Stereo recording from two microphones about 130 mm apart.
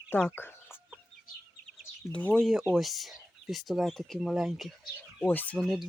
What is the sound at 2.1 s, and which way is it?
Speech, 10° left (ahead or behind).